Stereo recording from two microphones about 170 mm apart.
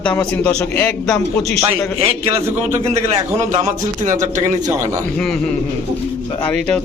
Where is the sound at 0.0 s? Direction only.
5° left (ahead or behind).